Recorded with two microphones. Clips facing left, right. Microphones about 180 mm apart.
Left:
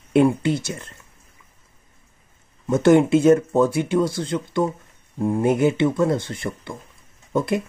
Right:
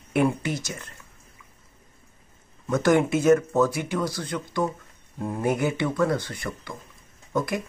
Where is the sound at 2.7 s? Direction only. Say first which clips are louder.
Left 6 dB; 25° left (ahead or behind).